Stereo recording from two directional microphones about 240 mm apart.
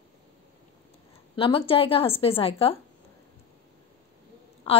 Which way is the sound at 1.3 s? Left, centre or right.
Left.